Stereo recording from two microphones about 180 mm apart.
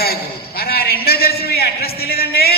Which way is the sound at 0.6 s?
60° left (ahead or behind).